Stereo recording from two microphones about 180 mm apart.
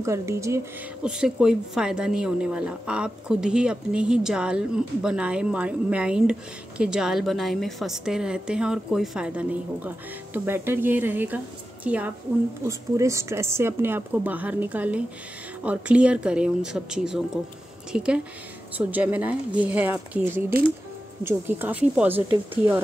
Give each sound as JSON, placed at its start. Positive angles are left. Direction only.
{"t": 0.0, "sound": "speech", "side_deg": -15}
{"t": 1.0, "sound": "a woman's voice", "side_deg": -5}